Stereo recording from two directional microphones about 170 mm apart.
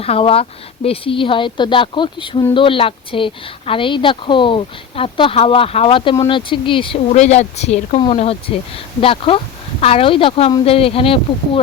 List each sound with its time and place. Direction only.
0.0 s a woman's voice: 35° left (ahead or behind)